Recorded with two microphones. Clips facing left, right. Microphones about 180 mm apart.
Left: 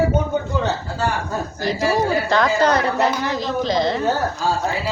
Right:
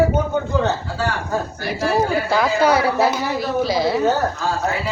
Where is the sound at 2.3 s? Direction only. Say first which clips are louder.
Even; 5° right (ahead or behind).